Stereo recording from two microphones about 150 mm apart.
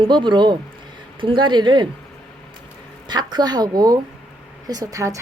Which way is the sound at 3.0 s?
30° right (ahead or behind).